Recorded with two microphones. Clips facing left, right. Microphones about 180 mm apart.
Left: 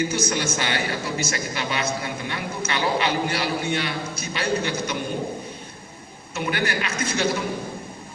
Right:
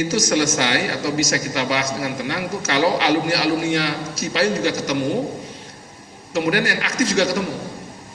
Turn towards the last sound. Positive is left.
turn(degrees=-80)